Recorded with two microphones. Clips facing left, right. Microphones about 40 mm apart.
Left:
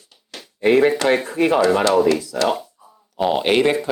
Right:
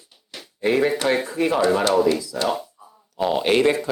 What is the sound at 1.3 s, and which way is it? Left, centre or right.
Speech, left.